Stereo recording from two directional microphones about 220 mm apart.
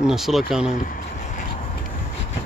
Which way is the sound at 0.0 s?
Centre (ahead or behind).